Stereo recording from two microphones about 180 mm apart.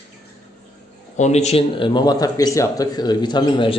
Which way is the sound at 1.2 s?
40° left (ahead or behind).